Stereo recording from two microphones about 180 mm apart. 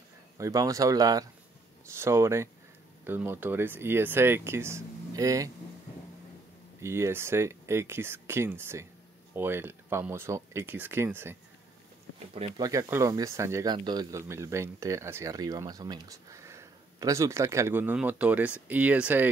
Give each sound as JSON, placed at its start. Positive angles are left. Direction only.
{"t": 0.4, "sound": "speech", "side_deg": -20}
{"t": 6.8, "sound": "speech", "side_deg": -15}
{"t": 12.5, "sound": "speech", "side_deg": -20}